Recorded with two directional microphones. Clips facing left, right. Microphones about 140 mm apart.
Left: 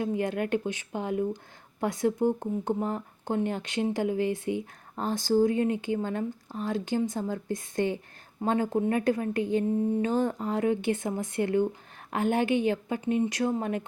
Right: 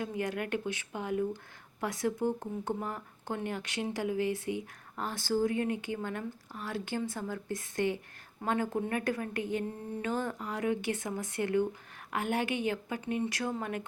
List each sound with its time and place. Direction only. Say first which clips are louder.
0.0 s speech: left 6 dB; 25° left (ahead or behind)